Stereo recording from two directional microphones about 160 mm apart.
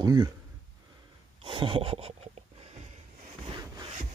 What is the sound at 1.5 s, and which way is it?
Rub, 35° right (ahead or behind).